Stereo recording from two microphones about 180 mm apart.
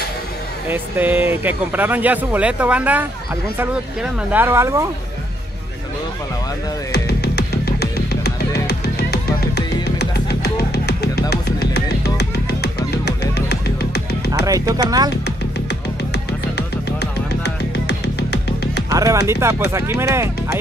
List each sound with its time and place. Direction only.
0.7 s speech: 10° right (ahead or behind)
6.9 s music: 65° left (ahead or behind)
14.4 s speech: 20° right (ahead or behind)
16.5 s music: 65° left (ahead or behind)
18.9 s speech: 15° right (ahead or behind)